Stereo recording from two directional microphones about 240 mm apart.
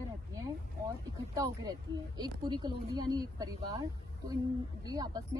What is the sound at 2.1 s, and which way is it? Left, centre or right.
A woman's voice, centre.